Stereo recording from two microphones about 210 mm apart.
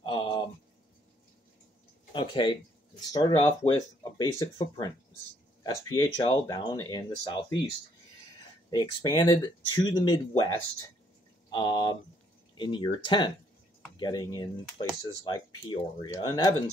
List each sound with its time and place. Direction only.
0.0 s a sound: 20° left (ahead or behind)
2.1 s speech: 25° left (ahead or behind)
8.6 s speech: 20° left (ahead or behind)